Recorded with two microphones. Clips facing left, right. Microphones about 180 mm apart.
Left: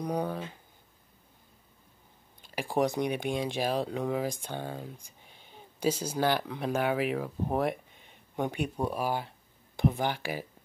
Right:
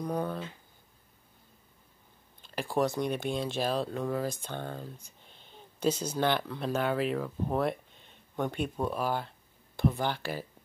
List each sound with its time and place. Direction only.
0.0 s speech: 15° left (ahead or behind)
2.4 s speech: 15° left (ahead or behind)